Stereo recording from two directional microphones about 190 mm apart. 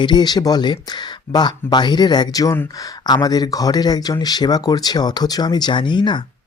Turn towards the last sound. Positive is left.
turn(degrees=25)  # may be behind; listen again after turning